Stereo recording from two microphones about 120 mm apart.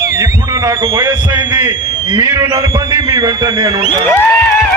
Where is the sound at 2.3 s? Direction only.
25° right (ahead or behind).